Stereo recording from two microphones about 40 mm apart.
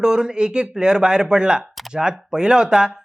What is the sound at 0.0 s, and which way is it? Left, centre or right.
Speech, centre.